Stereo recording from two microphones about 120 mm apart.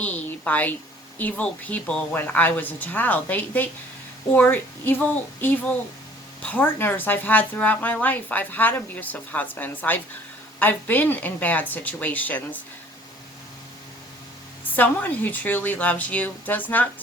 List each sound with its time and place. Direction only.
0.0 s a woman's voice: 10° left (ahead or behind)
14.8 s a woman's voice: 15° left (ahead or behind)